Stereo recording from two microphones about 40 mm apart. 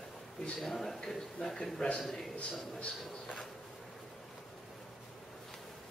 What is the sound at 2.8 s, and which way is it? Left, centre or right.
Speech, left.